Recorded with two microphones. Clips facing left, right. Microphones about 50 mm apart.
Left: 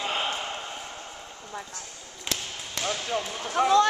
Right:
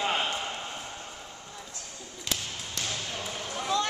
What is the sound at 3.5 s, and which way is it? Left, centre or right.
Speech, left.